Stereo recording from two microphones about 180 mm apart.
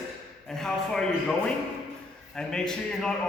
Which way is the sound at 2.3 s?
5° left (ahead or behind).